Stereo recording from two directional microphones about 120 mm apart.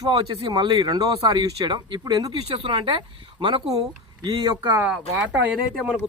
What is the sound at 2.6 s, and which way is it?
Speech, 45° right (ahead or behind).